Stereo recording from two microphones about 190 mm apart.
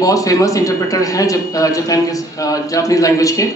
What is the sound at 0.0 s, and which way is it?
A woman's voice, 20° left (ahead or behind).